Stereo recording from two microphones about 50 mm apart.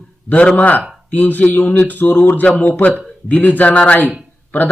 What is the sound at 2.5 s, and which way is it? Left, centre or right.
A man's voice, left.